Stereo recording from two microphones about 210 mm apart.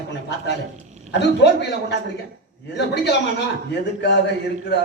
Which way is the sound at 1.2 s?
55° left (ahead or behind).